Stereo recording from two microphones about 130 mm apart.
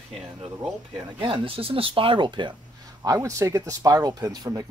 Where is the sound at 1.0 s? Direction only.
40° right (ahead or behind).